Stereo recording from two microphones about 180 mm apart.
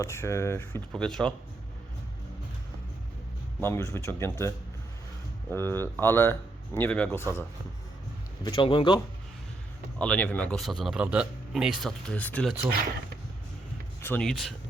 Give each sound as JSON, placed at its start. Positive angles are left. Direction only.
{"t": 0.0, "sound": "speech", "side_deg": 15}
{"t": 3.6, "sound": "speech", "side_deg": 15}
{"t": 8.4, "sound": "a man's voice", "side_deg": 30}
{"t": 10.0, "sound": "a man's voice", "side_deg": 5}
{"t": 14.0, "sound": "a man's voice", "side_deg": 10}